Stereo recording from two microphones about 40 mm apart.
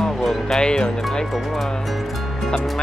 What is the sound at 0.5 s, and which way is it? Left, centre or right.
Speech, centre.